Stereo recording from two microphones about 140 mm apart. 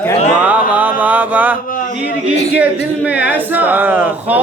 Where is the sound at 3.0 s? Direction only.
10° right (ahead or behind).